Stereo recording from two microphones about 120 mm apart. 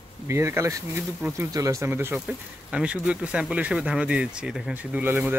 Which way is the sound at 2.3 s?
5° right (ahead or behind).